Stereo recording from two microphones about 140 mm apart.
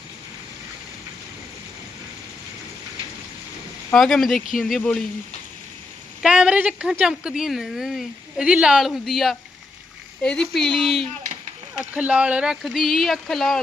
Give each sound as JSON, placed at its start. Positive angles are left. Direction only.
{"t": 3.9, "sound": "a woman's voice", "side_deg": 5}
{"t": 4.4, "sound": "speech", "side_deg": 75}
{"t": 4.8, "sound": "speech", "side_deg": 10}
{"t": 6.2, "sound": "a woman's voice", "side_deg": -5}